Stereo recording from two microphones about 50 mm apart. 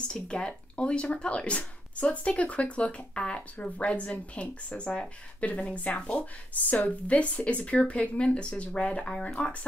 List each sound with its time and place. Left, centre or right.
0.1 s speech: centre